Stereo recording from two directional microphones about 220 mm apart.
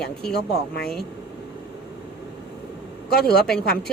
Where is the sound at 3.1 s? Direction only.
45° left (ahead or behind).